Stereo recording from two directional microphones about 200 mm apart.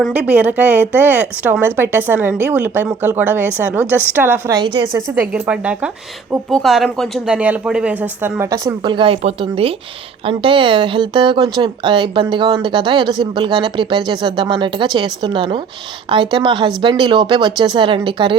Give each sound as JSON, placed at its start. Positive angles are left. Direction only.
{"t": 0.0, "sound": "a woman's voice", "side_deg": -5}